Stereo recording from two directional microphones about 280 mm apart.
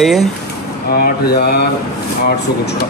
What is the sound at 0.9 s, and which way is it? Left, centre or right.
Speech, left.